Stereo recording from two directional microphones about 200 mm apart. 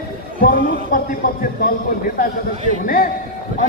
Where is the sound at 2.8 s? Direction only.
45° left (ahead or behind).